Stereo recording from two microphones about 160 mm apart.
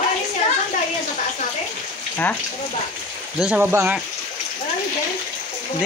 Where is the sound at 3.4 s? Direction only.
10° right (ahead or behind).